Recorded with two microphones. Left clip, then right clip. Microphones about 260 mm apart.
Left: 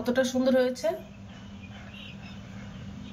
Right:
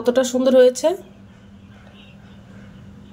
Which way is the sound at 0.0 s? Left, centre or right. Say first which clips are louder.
Right 8 dB; right.